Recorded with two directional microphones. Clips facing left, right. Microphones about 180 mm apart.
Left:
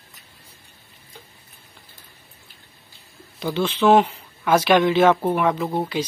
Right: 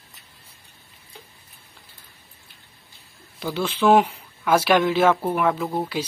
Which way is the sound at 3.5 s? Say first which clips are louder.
Left 1 dB; 10° right (ahead or behind).